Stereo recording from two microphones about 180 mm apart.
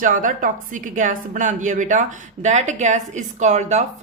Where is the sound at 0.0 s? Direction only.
45° right (ahead or behind).